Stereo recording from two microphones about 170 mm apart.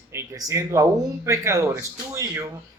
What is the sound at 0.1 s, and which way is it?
A man's voice, 20° right (ahead or behind).